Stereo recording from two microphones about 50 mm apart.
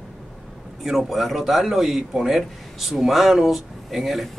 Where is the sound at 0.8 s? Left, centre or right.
Centre.